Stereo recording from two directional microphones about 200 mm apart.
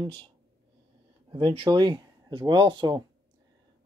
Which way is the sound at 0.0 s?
25° right (ahead or behind).